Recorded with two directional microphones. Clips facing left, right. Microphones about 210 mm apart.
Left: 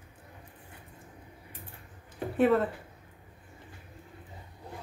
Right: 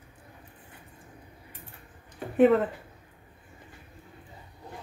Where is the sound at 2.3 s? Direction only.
20° right (ahead or behind).